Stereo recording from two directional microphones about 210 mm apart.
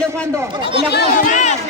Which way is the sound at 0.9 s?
50° left (ahead or behind).